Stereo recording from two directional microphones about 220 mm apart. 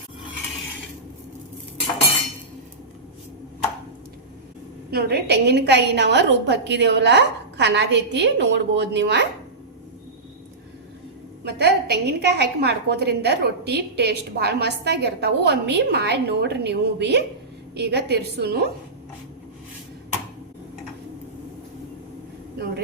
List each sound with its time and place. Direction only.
4.9 s a woman's voice: 45° right (ahead or behind)
11.4 s a woman's voice: 50° right (ahead or behind)
22.5 s speech: 45° right (ahead or behind)